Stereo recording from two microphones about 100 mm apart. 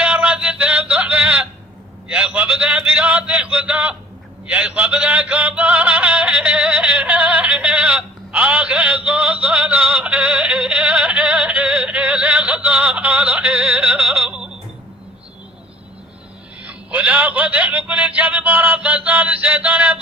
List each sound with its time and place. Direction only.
0.0 s a sound: 10° right (ahead or behind)
4.4 s yodeling: 10° right (ahead or behind)
16.6 s a man's voice: 15° right (ahead or behind)